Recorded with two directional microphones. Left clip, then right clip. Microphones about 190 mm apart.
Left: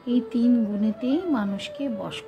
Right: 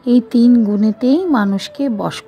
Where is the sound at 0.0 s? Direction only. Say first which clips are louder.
Right 11 dB; 55° right (ahead or behind).